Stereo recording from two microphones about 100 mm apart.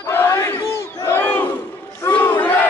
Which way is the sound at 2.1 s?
15° left (ahead or behind).